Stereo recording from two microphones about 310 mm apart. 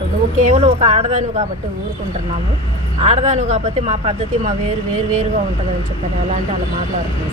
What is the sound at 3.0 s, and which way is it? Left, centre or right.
Speech, right.